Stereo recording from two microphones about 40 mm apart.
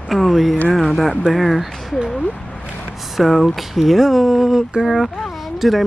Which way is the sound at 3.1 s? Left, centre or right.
Centre.